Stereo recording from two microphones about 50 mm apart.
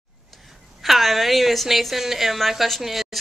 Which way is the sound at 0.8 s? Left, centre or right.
Centre.